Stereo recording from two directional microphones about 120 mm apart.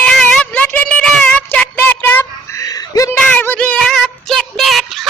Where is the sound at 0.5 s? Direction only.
15° left (ahead or behind).